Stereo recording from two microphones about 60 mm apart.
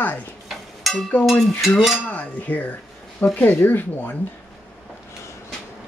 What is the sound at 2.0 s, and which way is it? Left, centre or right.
Cutlery, left.